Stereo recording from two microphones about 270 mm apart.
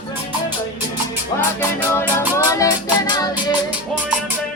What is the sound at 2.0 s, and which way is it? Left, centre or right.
Music, centre.